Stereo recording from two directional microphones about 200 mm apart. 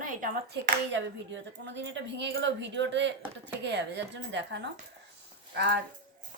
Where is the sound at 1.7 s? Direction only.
60° right (ahead or behind).